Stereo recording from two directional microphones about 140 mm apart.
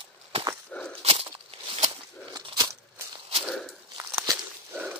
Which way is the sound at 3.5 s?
Centre (ahead or behind).